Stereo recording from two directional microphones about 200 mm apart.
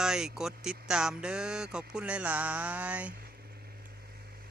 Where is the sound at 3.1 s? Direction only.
50° right (ahead or behind).